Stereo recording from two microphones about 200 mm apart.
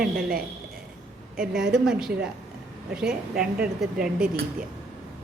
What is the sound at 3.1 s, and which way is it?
Speech, 5° right (ahead or behind).